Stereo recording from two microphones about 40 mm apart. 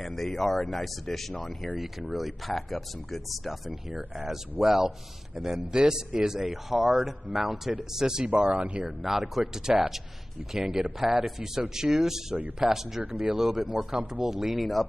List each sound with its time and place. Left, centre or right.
0.0 s speech: centre
4.3 s speech: centre
6.5 s speech: centre
8.3 s speech: right
8.8 s speech: centre
14.3 s speech: centre